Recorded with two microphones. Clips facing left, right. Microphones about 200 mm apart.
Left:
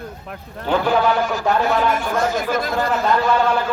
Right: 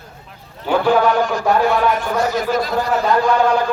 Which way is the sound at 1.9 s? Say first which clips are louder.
Right 1 dB; 50° left (ahead or behind).